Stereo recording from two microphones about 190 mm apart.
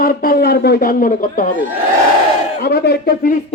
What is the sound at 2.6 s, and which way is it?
Speech, 55° left (ahead or behind).